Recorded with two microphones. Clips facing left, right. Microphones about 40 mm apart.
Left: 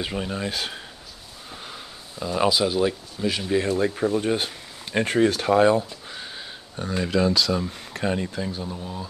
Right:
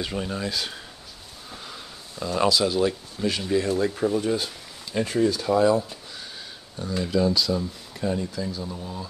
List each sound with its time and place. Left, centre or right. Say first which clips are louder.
0.0 s speech: left 1 dB; centre
1.5 s speech: left 1 dB; centre
3.5 s speech: left 1 dB; left
4.2 s speech: left 1 dB; left
6.1 s a sound: left 5 dB; left
6.8 s speech: left 2 dB; left
7.2 s speech: left 1 dB; left
8.6 s speech: left 1 dB; centre